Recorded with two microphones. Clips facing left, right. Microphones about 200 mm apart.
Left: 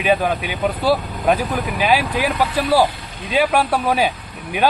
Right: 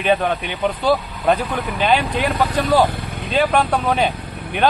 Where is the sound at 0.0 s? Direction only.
5° left (ahead or behind).